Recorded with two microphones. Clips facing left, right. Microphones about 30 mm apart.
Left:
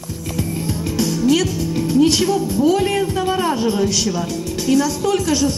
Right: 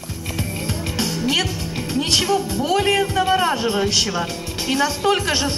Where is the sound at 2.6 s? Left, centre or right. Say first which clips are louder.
Left 3 dB; centre.